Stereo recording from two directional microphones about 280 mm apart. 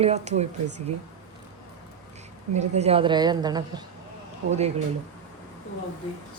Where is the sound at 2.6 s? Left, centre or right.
Right.